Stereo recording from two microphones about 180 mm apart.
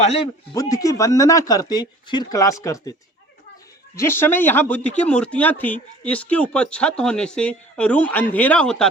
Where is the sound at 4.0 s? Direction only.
15° left (ahead or behind).